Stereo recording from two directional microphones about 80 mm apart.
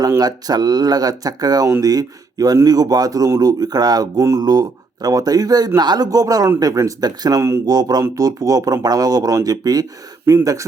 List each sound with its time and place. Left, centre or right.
0.2 s speech: right